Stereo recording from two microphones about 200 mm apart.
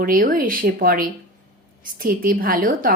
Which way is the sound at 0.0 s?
45° right (ahead or behind).